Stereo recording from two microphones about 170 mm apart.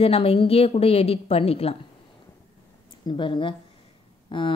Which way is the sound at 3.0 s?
30° left (ahead or behind).